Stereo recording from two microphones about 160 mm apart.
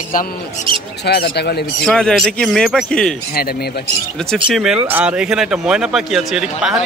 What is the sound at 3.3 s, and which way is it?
Speech, 75° left (ahead or behind).